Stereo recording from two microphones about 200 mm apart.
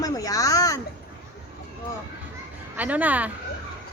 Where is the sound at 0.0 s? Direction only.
15° left (ahead or behind).